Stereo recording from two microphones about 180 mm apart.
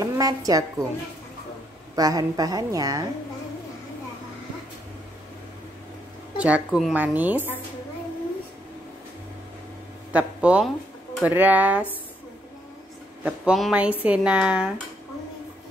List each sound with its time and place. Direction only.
0.0 s a woman's voice: 20° right (ahead or behind)
2.0 s a woman's voice: 20° right (ahead or behind)
6.3 s speech: 5° right (ahead or behind)
10.1 s speech: 5° right (ahead or behind)
13.2 s speech: 5° right (ahead or behind)